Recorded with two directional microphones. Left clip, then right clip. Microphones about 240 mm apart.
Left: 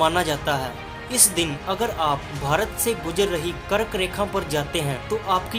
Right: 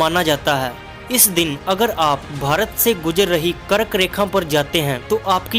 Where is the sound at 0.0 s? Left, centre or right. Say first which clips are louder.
Right 4 dB; right.